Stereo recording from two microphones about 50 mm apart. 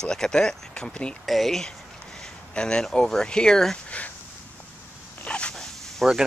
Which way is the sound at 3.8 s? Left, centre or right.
Left.